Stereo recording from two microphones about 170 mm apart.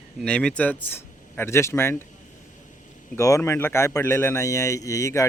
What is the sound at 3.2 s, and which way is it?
Speech, 20° left (ahead or behind).